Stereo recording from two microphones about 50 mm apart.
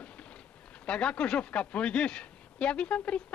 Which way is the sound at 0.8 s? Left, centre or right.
Centre.